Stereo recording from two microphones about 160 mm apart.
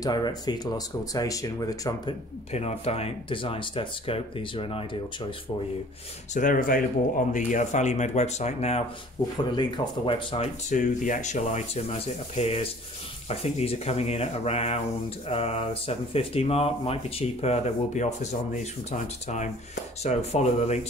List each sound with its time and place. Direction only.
0.0 s speech: 25° left (ahead or behind)
2.5 s speech: 40° left (ahead or behind)
6.3 s speech: 60° left (ahead or behind); by 8.8 s 40° left (ahead or behind)
9.4 s speech: 30° left (ahead or behind)
10.7 s speech: 50° left (ahead or behind)